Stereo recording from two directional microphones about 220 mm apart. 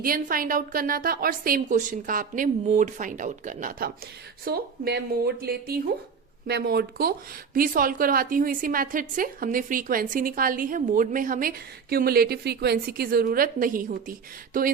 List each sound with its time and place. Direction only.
0.0 s a woman's voice: 40° right (ahead or behind)